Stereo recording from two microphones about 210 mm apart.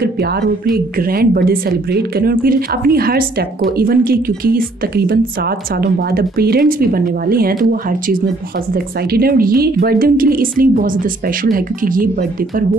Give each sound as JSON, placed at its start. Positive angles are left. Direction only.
{"t": 0.0, "sound": "a woman's voice", "side_deg": -50}
{"t": 8.7, "sound": "a woman's voice", "side_deg": -45}